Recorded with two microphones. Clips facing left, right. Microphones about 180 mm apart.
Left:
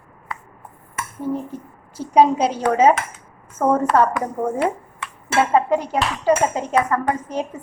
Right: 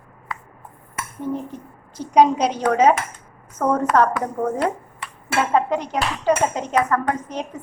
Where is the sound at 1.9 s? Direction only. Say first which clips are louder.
Even; 5° left (ahead or behind).